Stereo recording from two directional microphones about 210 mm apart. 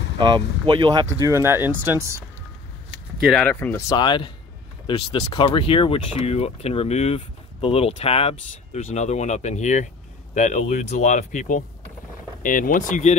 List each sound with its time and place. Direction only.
0.2 s speech: 20° right (ahead or behind)
3.2 s speech: centre (ahead or behind)
3.9 s speech: 20° left (ahead or behind); by 13.1 s 35° left (ahead or behind)